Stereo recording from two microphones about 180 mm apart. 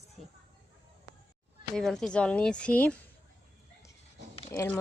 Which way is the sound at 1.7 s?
5° left (ahead or behind).